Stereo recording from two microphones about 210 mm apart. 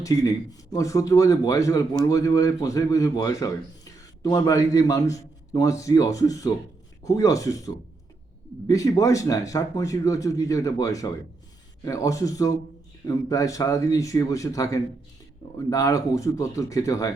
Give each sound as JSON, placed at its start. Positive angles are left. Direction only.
{"t": 0.0, "sound": "speech", "side_deg": 15}